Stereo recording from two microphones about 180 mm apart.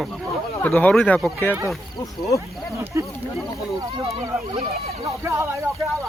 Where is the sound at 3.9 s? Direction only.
30° right (ahead or behind).